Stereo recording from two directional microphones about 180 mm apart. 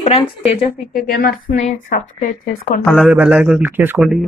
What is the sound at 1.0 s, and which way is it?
Speech, 55° left (ahead or behind).